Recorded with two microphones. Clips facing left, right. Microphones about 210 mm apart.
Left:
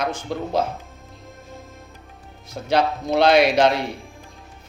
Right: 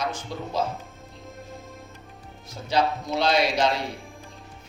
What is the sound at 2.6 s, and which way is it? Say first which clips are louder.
A man's voice: left 4 dB; 60° left (ahead or behind).